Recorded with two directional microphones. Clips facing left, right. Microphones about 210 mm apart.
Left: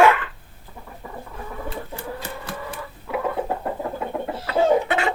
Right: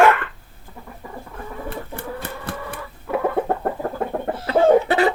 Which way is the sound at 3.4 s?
55° right (ahead or behind).